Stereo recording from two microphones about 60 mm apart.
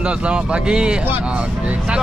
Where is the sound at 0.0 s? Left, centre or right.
Centre.